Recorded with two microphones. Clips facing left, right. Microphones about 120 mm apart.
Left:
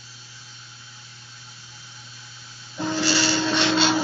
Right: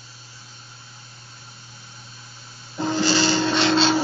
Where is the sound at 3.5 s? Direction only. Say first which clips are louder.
Right 3 dB; centre (ahead or behind).